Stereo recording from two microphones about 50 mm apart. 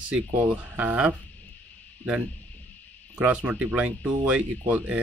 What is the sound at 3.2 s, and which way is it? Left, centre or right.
Speech, right.